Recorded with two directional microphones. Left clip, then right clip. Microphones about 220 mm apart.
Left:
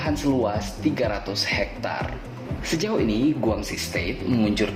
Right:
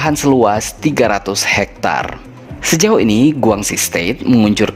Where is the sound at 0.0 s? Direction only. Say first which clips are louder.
Right 12 dB; 50° right (ahead or behind).